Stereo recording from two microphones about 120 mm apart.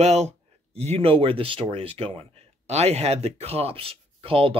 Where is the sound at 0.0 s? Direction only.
65° right (ahead or behind).